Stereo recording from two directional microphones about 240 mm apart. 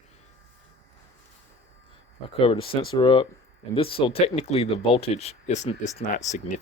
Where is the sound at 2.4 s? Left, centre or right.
Left.